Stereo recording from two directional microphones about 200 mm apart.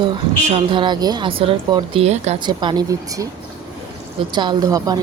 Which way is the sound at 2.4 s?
20° right (ahead or behind).